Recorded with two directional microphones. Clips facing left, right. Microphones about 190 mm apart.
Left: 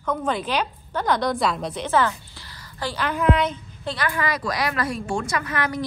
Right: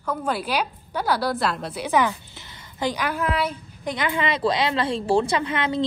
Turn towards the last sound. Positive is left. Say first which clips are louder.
# right 2 dB
turn(degrees=-25)  # may be behind; listen again after turning